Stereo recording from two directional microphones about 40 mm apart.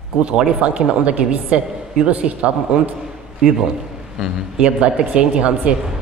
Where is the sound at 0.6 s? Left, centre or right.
Right.